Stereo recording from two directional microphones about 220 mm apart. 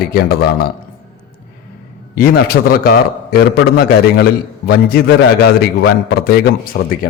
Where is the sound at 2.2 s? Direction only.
45° left (ahead or behind).